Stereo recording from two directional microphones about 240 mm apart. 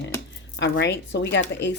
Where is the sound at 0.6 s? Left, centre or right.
Left.